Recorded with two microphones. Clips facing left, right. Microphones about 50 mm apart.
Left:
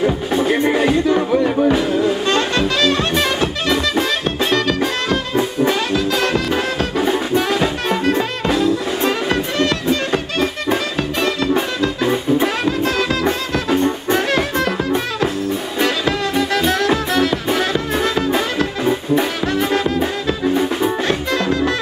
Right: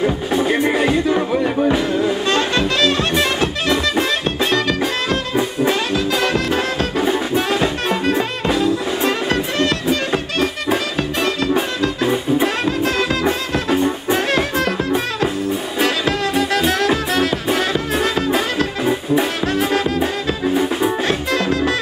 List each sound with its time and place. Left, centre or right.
0.0 s music: centre
7.3 s music: centre
10.7 s music: centre
12.0 s music: centre
13.7 s music: centre
16.3 s music: centre
17.7 s music: centre
20.0 s music: centre
21.3 s music: centre